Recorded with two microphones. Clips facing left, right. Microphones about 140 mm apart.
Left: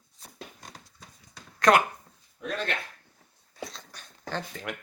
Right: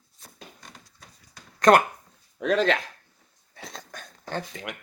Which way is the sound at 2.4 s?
90° right.